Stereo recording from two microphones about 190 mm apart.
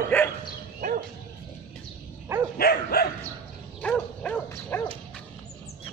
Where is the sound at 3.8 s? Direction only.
5° left (ahead or behind).